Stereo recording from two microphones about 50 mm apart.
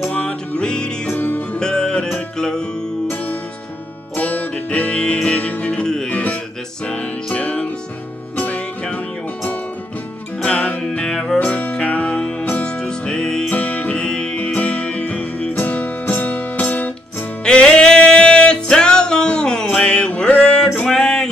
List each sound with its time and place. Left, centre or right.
0.1 s music: left
1.1 s music: left
1.6 s music: centre
4.1 s music: left
6.8 s music: centre
11.3 s music: left
13.5 s music: left
14.0 s music: centre
17.4 s music: centre